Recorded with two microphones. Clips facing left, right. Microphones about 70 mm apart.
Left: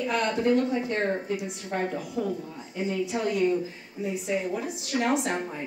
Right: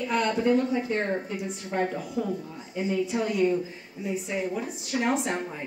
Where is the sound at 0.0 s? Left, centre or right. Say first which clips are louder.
Even; centre.